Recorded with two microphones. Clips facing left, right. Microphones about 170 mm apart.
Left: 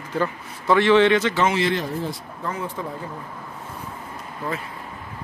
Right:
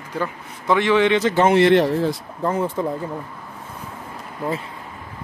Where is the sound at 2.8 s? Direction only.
35° right (ahead or behind).